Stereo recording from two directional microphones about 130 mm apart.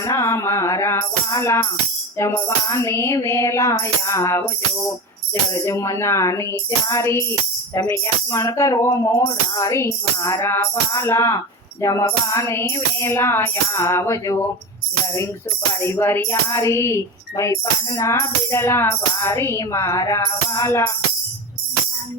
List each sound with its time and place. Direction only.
0.0 s speech: 25° left (ahead or behind)